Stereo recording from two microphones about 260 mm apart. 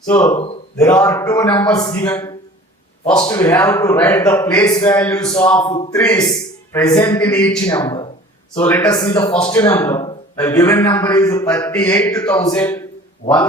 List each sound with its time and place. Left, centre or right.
0.1 s a man's voice: centre